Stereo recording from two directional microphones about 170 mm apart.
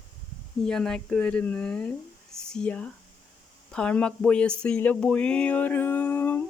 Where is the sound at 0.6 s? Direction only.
5° left (ahead or behind).